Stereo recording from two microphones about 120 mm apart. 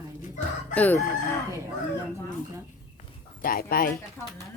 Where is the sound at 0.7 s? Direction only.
10° left (ahead or behind).